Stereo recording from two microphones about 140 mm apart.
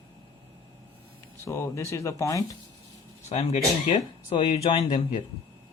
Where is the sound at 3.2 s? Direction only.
50° left (ahead or behind).